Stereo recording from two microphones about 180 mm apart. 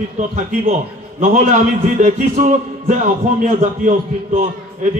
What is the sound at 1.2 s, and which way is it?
A man's voice, 45° right (ahead or behind).